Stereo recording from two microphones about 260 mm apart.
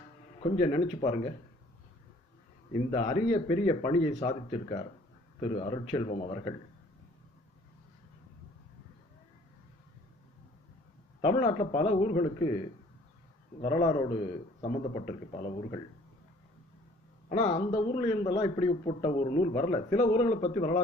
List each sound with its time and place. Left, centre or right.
0.6 s a man's voice: left
2.9 s a man's voice: left
11.2 s a man's voice: centre
13.6 s a man's voice: left
17.2 s a man's voice: left